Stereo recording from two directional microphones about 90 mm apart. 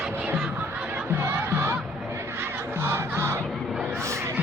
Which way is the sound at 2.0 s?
30° right (ahead or behind).